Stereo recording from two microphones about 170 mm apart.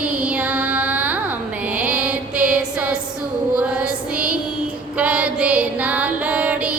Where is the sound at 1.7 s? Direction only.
5° right (ahead or behind).